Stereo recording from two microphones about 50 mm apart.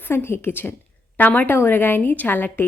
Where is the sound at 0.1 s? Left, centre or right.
Left.